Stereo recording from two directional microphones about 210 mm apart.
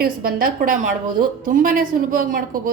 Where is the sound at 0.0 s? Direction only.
45° right (ahead or behind).